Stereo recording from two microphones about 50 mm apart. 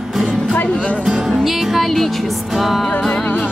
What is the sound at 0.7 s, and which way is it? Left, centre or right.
Music, left.